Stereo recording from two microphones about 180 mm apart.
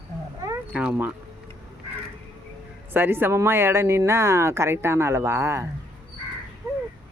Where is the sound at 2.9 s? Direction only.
10° right (ahead or behind).